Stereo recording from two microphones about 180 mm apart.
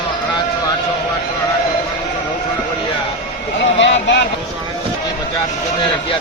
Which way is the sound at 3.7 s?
90° left.